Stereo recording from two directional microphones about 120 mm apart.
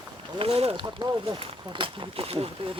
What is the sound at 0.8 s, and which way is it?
Speech, 35° right (ahead or behind).